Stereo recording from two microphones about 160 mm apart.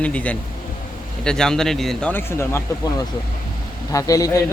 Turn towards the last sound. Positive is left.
turn(degrees=20)  # may be behind; listen again after turning